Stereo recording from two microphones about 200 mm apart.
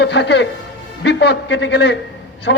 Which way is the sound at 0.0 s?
60° left (ahead or behind).